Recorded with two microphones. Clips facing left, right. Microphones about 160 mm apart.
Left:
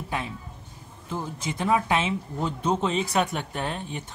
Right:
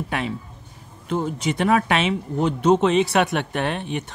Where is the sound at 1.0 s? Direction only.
80° right.